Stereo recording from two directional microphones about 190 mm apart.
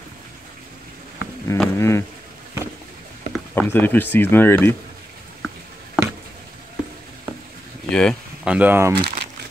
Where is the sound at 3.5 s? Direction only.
10° left (ahead or behind).